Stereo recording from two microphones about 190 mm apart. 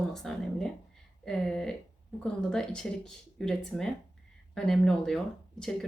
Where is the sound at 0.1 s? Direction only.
Centre (ahead or behind).